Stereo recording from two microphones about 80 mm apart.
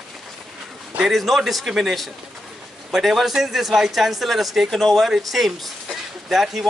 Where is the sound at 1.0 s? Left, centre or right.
Centre.